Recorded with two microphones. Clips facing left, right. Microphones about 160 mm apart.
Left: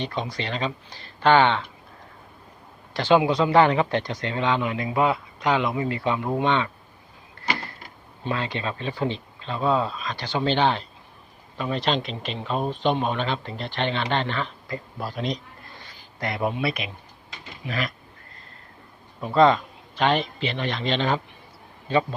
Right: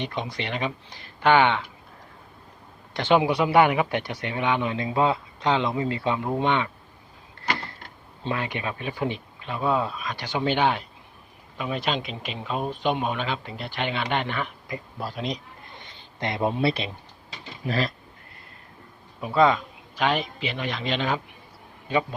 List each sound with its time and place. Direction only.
0.0 s speech: 15° right (ahead or behind)
2.9 s a man's voice: 20° right (ahead or behind)
8.2 s a man's voice: 20° right (ahead or behind)
14.9 s a man's voice: centre (ahead or behind)
15.8 s speech: 25° right (ahead or behind)
19.2 s a man's voice: 5° right (ahead or behind)